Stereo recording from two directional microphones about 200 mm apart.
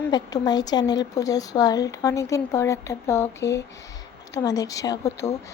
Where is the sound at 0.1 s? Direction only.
20° left (ahead or behind).